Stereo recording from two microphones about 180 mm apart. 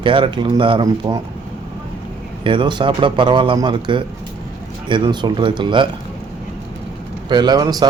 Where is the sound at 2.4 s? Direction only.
30° right (ahead or behind).